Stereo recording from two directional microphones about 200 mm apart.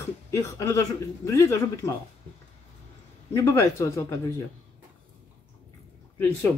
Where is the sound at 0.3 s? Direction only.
15° left (ahead or behind).